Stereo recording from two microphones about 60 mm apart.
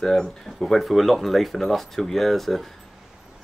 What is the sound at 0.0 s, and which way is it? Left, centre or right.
A man's voice, centre.